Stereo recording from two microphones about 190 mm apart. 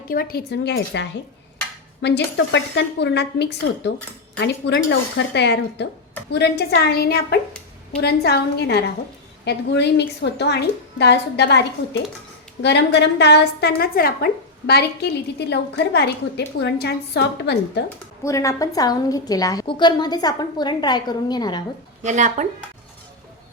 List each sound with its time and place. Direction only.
0.1 s a woman's voice: 50° left (ahead or behind)
12.6 s a woman's voice: 65° left (ahead or behind)
17.8 s a woman's voice: 15° left (ahead or behind)
22.0 s speech: 40° right (ahead or behind)